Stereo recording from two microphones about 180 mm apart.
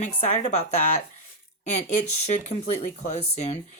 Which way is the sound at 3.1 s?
40° left (ahead or behind).